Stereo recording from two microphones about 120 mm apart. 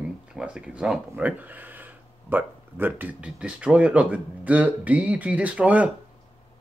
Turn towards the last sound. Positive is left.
turn(degrees=-10)  # may be behind; listen again after turning